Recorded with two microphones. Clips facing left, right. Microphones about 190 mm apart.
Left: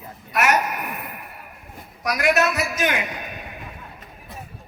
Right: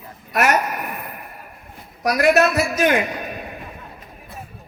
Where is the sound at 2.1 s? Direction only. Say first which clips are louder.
Right 5 dB; 35° right (ahead or behind).